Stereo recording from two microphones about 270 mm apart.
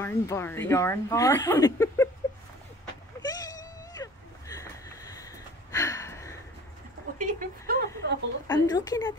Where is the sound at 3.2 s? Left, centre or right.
Centre.